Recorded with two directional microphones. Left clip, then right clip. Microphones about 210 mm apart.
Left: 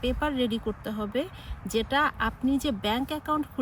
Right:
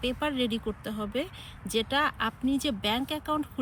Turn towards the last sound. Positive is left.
turn(degrees=10)  # may be behind; listen again after turning